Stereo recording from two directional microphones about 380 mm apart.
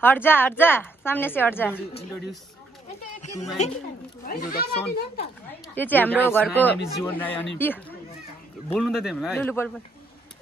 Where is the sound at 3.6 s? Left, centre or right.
Centre.